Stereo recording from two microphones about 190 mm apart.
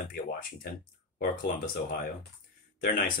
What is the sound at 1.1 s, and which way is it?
Speech, 50° left (ahead or behind).